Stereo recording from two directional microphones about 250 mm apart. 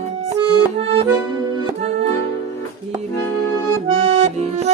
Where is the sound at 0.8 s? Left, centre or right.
Right.